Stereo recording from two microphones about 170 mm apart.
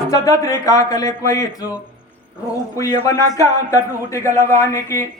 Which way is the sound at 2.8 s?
20° left (ahead or behind).